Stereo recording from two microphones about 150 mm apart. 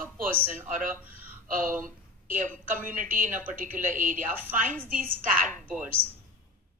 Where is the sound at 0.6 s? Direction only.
60° right (ahead or behind).